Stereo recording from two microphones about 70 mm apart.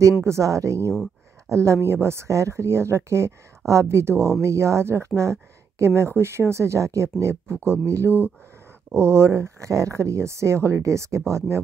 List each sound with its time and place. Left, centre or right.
0.2 s speech: right